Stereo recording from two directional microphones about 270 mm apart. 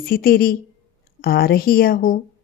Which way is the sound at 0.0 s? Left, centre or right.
Left.